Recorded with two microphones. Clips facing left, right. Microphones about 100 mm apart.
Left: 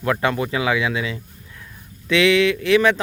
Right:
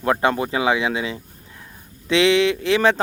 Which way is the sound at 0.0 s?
30° right (ahead or behind).